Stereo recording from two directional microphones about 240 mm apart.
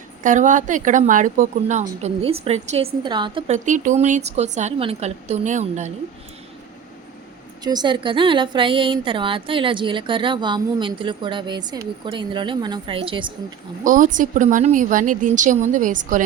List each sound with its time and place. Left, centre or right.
0.2 s a woman's voice: right
7.6 s a woman's voice: centre
13.8 s speech: right